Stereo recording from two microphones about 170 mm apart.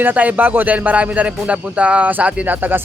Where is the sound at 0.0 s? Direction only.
10° right (ahead or behind).